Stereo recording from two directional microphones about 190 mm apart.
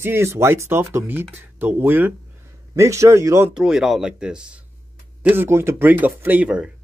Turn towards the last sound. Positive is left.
turn(degrees=-5)  # may be behind; listen again after turning